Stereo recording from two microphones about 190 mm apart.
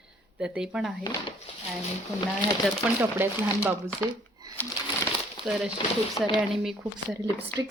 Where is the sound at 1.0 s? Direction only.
20° left (ahead or behind).